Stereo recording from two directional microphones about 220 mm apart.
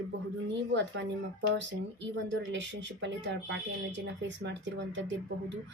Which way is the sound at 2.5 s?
55° right (ahead or behind).